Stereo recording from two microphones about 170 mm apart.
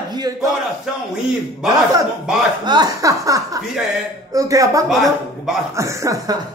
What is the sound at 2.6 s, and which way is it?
Speech, 25° right (ahead or behind).